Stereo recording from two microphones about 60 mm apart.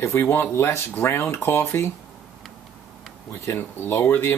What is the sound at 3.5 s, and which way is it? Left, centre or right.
Speech, left.